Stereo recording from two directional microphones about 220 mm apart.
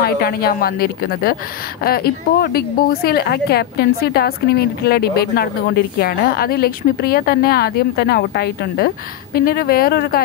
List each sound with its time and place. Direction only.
0.0 s speech: 45° left (ahead or behind)